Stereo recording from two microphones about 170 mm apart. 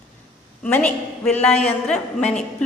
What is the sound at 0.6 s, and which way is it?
A man's voice, 10° left (ahead or behind).